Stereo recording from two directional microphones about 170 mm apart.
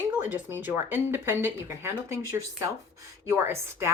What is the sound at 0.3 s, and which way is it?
A woman's voice, 10° right (ahead or behind).